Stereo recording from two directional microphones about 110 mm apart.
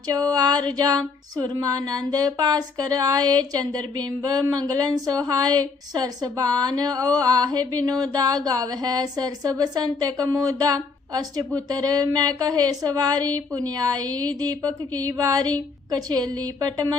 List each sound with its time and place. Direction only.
0.2 s a woman's voice: 35° right (ahead or behind)